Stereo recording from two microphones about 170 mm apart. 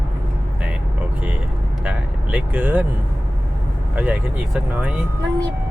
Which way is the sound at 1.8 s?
10° right (ahead or behind).